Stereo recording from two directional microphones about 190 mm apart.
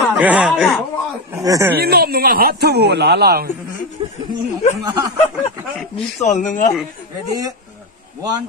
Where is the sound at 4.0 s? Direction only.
25° right (ahead or behind).